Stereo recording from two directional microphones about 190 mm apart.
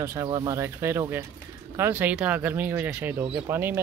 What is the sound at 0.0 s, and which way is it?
Speech, 15° right (ahead or behind).